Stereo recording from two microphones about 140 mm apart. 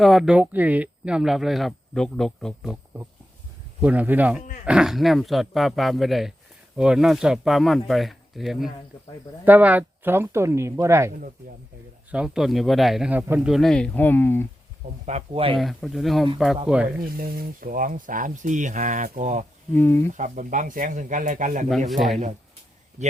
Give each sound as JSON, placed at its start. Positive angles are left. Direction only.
{"t": 0.0, "sound": "speech", "side_deg": 0}
{"t": 3.8, "sound": "speech", "side_deg": -10}
{"t": 12.1, "sound": "speech", "side_deg": -5}
{"t": 13.5, "sound": "speech", "side_deg": 5}
{"t": 15.0, "sound": "speech", "side_deg": -45}
{"t": 15.5, "sound": "speech", "side_deg": 0}
{"t": 17.0, "sound": "speech", "side_deg": -90}
{"t": 19.7, "sound": "speech", "side_deg": 15}
{"t": 20.1, "sound": "speech", "side_deg": -60}
{"t": 21.8, "sound": "speech", "side_deg": 0}